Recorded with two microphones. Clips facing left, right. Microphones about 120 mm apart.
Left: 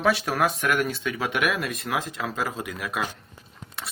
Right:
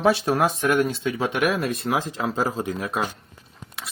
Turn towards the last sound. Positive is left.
turn(degrees=-30)  # may be behind; listen again after turning